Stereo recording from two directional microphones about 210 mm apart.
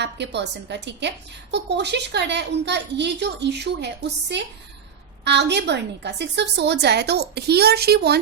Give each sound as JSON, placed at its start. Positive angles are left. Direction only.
{"t": 0.0, "sound": "a woman's voice", "side_deg": -55}